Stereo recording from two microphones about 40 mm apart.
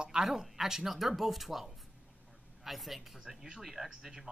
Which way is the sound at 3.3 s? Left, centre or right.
Centre.